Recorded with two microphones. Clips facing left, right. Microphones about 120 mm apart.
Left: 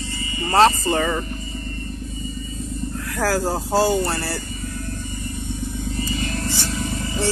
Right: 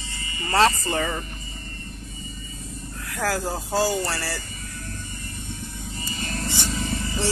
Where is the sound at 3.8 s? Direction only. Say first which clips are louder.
Left 3 dB; 25° left (ahead or behind).